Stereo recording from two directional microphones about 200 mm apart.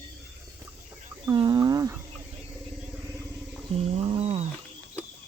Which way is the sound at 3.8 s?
30° right (ahead or behind).